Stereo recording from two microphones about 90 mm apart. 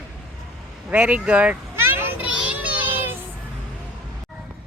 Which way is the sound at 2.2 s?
10° right (ahead or behind).